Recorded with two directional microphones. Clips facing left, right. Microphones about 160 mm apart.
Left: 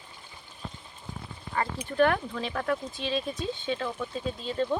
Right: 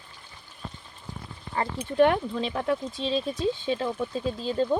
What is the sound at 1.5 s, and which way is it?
Speech, 25° right (ahead or behind).